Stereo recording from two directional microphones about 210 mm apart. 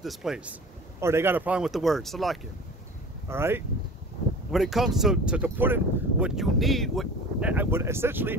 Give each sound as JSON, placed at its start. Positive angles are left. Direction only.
{"t": 0.0, "sound": "speech", "side_deg": 0}
{"t": 3.3, "sound": "speech", "side_deg": -10}
{"t": 4.5, "sound": "speech", "side_deg": 0}